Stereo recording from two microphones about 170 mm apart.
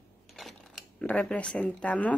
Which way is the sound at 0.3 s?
Centre (ahead or behind).